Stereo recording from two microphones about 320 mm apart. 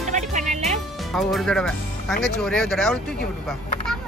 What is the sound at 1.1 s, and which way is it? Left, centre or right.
Speech, centre.